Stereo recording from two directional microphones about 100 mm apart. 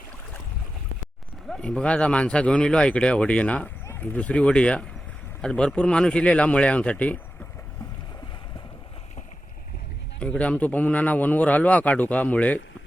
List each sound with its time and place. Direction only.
1.5 s a man's voice: 5° left (ahead or behind)
10.2 s a man's voice: 15° left (ahead or behind)